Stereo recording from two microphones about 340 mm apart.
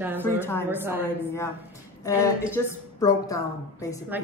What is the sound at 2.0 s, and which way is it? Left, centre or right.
A woman's voice, centre.